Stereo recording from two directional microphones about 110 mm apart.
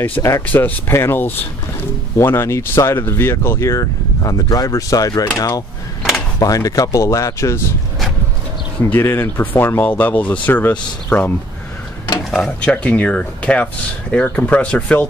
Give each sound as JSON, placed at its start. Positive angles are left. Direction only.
{"t": 0.2, "sound": "speech", "side_deg": 30}
{"t": 0.5, "sound": "speech", "side_deg": 15}
{"t": 8.9, "sound": "speech", "side_deg": 20}
{"t": 12.3, "sound": "speech", "side_deg": 5}